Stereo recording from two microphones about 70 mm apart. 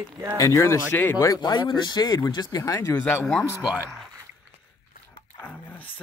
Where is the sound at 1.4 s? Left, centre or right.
Left.